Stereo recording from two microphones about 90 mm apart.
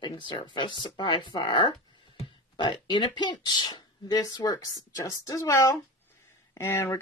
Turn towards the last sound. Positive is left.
turn(degrees=30)  # may be behind; listen again after turning